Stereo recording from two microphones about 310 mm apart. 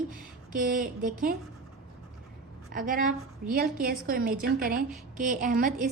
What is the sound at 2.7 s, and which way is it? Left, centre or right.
A woman's voice, right.